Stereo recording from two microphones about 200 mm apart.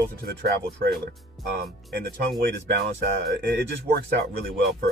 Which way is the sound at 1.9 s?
55° right (ahead or behind).